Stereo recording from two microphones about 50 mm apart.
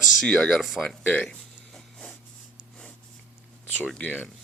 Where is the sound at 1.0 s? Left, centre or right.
Left.